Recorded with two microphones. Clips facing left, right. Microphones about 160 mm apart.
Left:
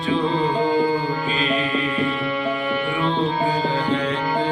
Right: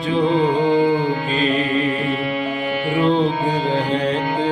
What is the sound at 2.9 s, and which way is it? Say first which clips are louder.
Music: right 8 dB; 40° right (ahead or behind).